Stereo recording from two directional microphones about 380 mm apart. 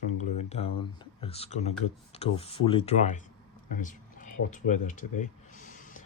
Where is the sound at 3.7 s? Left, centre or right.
Left.